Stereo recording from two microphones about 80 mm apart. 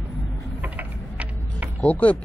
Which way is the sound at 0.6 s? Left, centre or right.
Centre.